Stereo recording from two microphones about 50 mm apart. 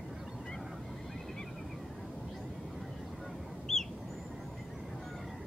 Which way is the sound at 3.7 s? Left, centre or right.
Centre.